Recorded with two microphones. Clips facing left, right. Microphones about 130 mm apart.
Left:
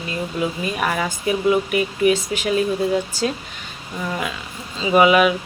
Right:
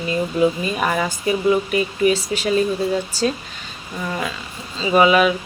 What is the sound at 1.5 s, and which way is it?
Speech, 10° left (ahead or behind).